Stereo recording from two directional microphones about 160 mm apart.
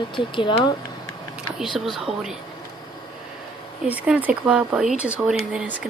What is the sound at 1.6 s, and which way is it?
Speech, centre (ahead or behind).